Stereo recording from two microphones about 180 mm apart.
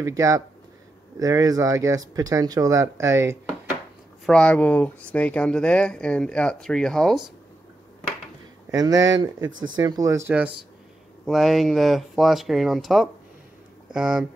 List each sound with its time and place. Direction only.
0.0 s speech: 15° right (ahead or behind)
4.3 s speech: 5° left (ahead or behind)
8.7 s speech: 20° right (ahead or behind)
9.5 s speech: 90° right
9.8 s speech: 20° right (ahead or behind)
11.2 s speech: centre (ahead or behind)